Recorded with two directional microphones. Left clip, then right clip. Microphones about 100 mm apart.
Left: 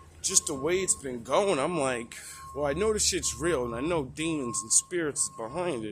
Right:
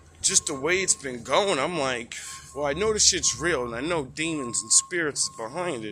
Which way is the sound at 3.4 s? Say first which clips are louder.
Left 1 dB; 30° left (ahead or behind).